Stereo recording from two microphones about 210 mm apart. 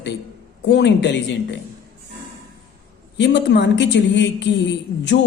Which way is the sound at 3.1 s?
55° left (ahead or behind).